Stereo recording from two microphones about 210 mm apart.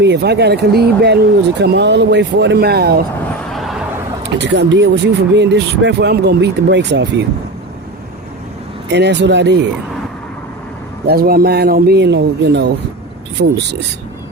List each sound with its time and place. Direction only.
0.0 s speech: 55° right (ahead or behind)
3.5 s a sound: centre (ahead or behind)
4.4 s speech: 55° right (ahead or behind)
8.9 s speech: 55° right (ahead or behind)
11.0 s speech: 45° right (ahead or behind)